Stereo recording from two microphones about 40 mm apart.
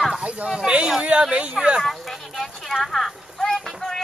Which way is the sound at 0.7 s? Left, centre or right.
Right.